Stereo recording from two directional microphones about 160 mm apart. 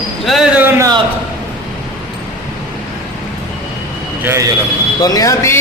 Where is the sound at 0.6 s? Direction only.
20° right (ahead or behind).